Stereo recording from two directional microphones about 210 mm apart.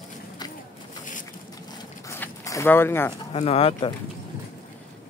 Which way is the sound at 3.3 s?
30° left (ahead or behind).